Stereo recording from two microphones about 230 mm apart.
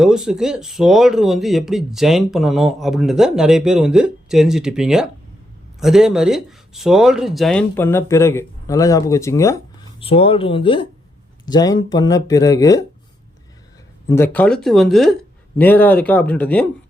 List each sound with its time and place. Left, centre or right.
0.0 s speech: centre
10.0 s speech: left
14.1 s speech: centre